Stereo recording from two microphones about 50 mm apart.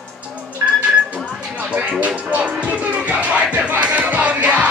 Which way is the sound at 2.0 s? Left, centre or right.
Right.